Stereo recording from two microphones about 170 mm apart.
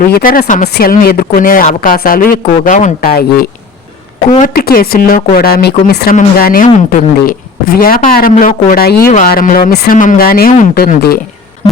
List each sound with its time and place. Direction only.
0.1 s speech: 55° left (ahead or behind)
0.7 s speech: 60° left (ahead or behind)
3.1 s speech: 65° left (ahead or behind)
4.3 s speech: 50° left (ahead or behind); by 6.1 s 70° left (ahead or behind)
6.1 s speech: 55° left (ahead or behind)